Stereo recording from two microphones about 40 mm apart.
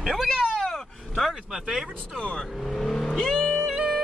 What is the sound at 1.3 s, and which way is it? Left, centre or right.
Speech, centre.